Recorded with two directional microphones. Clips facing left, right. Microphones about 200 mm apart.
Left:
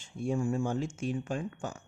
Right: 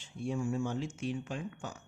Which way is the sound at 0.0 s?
45° left (ahead or behind).